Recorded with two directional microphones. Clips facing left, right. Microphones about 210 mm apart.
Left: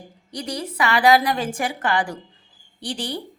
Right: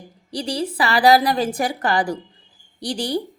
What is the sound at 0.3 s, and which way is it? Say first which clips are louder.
A woman's voice: right 5 dB; 30° right (ahead or behind).